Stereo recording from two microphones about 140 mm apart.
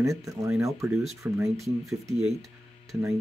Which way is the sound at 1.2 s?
20° right (ahead or behind).